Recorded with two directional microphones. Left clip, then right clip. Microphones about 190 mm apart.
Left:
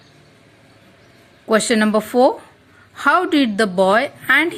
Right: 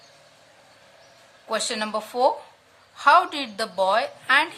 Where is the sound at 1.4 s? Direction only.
25° left (ahead or behind).